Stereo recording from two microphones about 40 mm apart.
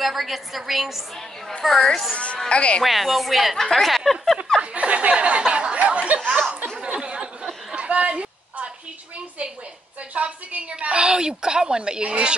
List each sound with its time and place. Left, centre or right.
0.0 s a woman's voice: centre
1.6 s a woman's voice: centre
2.5 s speech: left
2.8 s a woman's voice: centre
3.5 s a woman's voice: centre
4.6 s a sound: right
10.1 s a woman's voice: right